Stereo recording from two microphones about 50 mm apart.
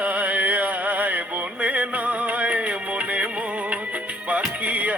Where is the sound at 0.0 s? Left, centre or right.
Right.